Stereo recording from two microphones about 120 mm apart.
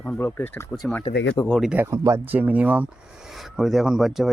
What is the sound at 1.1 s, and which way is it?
Speech, 60° left (ahead or behind).